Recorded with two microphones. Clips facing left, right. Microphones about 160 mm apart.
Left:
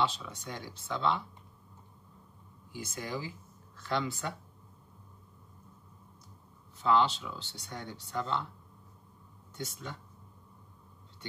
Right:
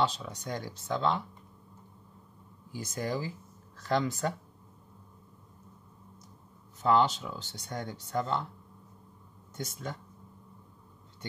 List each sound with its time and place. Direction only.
0.0 s speech: 40° right (ahead or behind)
2.7 s speech: 40° right (ahead or behind)
6.8 s speech: 45° right (ahead or behind)
9.6 s speech: 45° right (ahead or behind)